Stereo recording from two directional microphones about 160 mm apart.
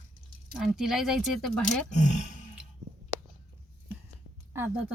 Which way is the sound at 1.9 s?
50° left (ahead or behind).